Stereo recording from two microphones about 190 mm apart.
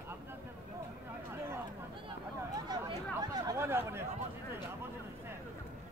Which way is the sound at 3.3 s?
15° right (ahead or behind).